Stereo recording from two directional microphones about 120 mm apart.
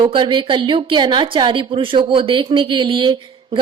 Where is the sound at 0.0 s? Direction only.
45° right (ahead or behind).